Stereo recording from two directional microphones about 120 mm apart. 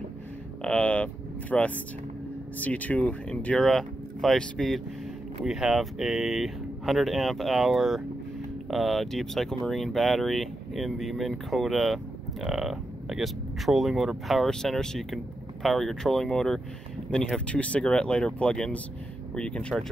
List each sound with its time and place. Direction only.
0.7 s speech: 10° left (ahead or behind)